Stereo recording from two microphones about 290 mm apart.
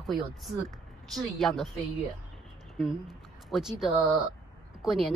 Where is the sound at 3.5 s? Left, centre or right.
Centre.